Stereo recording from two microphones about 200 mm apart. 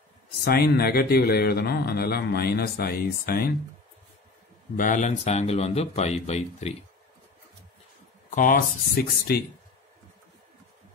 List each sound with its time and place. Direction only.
0.4 s speech: 50° left (ahead or behind)
4.7 s speech: 40° left (ahead or behind)
8.3 s speech: 40° left (ahead or behind)